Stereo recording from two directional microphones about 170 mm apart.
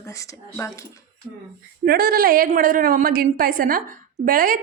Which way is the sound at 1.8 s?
60° right (ahead or behind).